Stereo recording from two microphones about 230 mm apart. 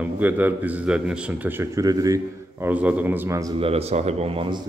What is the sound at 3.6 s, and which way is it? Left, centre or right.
Speech, right.